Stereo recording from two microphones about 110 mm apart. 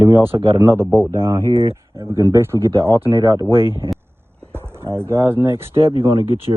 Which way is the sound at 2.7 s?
55° right (ahead or behind).